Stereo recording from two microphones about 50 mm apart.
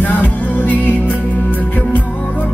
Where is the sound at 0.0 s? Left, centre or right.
Left.